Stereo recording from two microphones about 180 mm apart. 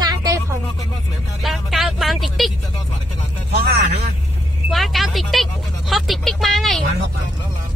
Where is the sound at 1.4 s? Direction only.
Centre (ahead or behind).